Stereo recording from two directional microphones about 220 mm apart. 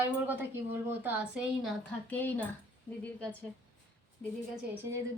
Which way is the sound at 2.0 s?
10° left (ahead or behind).